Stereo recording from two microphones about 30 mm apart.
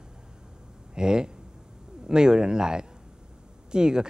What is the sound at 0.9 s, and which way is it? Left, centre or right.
Speech, right.